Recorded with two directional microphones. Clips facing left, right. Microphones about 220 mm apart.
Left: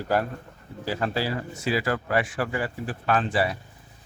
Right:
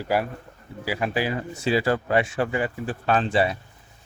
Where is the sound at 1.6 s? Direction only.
30° right (ahead or behind).